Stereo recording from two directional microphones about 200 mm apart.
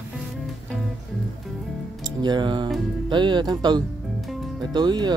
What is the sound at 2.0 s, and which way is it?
Speech, 20° right (ahead or behind).